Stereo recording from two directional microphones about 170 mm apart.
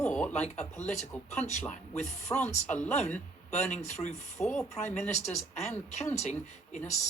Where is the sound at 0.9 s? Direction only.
40° left (ahead or behind).